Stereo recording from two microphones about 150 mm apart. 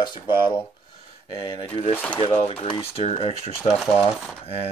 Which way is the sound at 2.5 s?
40° left (ahead or behind).